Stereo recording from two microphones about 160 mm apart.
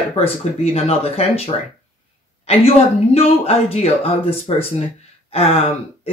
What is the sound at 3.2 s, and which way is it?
Speech, 40° left (ahead or behind).